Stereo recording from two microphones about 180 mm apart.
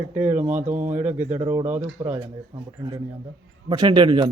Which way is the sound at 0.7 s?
45° right (ahead or behind).